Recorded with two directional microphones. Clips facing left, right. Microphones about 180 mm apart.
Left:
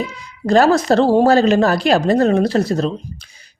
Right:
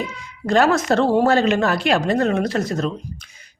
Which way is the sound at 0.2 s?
35° left (ahead or behind).